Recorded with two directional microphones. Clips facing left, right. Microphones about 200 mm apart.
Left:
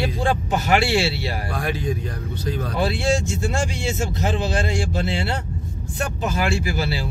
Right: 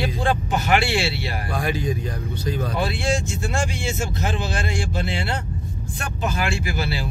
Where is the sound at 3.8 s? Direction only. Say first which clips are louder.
Left 2 dB; 40° left (ahead or behind).